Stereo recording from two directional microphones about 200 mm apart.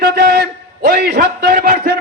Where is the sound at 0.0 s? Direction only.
50° right (ahead or behind).